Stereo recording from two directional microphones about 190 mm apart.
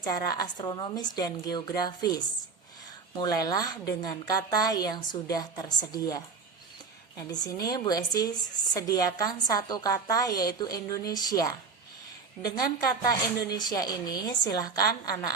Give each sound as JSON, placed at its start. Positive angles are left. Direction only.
{"t": 0.0, "sound": "a woman's voice", "side_deg": 20}
{"t": 7.3, "sound": "a woman's voice", "side_deg": 20}
{"t": 12.9, "sound": "a woman's voice", "side_deg": 20}